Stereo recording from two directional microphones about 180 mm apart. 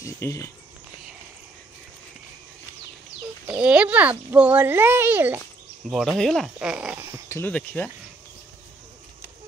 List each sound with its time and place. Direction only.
0.0 s speech: 15° left (ahead or behind)
3.4 s a child's voice: 5° right (ahead or behind)
7.2 s speech: 15° left (ahead or behind)